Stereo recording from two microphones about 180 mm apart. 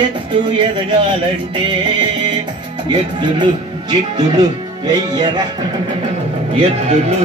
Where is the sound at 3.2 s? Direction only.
25° right (ahead or behind).